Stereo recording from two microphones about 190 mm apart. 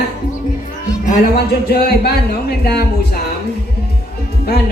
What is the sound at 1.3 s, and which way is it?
Speech, 55° left (ahead or behind).